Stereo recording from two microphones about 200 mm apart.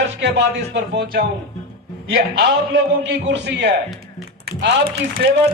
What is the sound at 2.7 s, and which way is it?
Speech, 60° right (ahead or behind).